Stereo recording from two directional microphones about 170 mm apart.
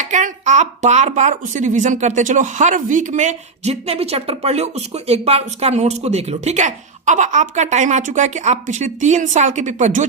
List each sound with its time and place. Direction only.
0.0 s a woman's voice: 45° right (ahead or behind)